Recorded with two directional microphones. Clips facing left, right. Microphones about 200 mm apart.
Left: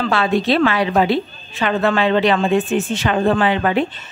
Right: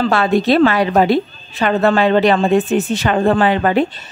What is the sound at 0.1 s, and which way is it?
Speech, 45° right (ahead or behind).